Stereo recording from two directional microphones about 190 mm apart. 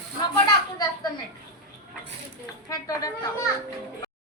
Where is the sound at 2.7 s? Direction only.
20° left (ahead or behind).